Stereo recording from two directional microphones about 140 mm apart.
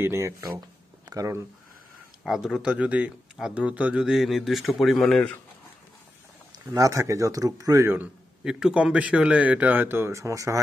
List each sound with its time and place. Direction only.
0.0 s speech: 20° right (ahead or behind)
2.2 s speech: 5° right (ahead or behind)
6.7 s speech: 25° right (ahead or behind)
8.5 s a man's voice: 5° right (ahead or behind); by 10.6 s 25° right (ahead or behind)